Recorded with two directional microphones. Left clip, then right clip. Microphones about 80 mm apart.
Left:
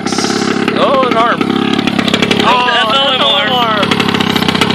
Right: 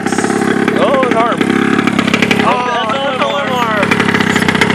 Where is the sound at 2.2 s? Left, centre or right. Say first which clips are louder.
Left 3 dB; left.